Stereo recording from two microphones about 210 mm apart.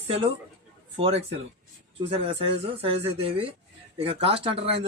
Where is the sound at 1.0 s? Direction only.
30° right (ahead or behind).